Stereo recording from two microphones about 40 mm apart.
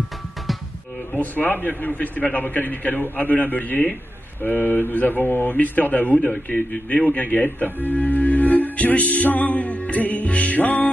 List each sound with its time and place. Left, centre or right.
1.1 s a man's voice: left